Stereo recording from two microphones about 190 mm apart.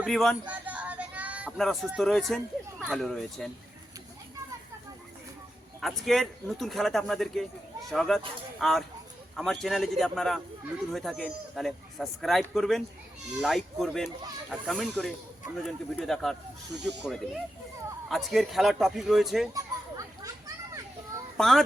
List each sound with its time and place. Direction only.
0.0 s speech: centre (ahead or behind)
5.8 s a man's voice: centre (ahead or behind)
19.5 s children playing: 15° right (ahead or behind)
21.3 s a child's voice: centre (ahead or behind)